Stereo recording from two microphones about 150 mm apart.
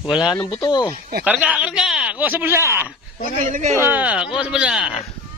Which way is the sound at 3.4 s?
55° right (ahead or behind).